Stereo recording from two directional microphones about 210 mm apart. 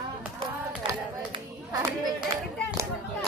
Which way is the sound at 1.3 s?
15° right (ahead or behind).